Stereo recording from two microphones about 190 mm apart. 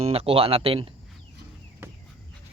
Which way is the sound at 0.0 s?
30° right (ahead or behind).